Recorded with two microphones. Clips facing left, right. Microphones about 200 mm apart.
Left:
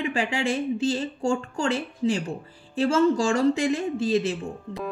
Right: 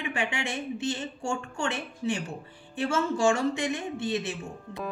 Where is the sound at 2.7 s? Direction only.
35° left (ahead or behind).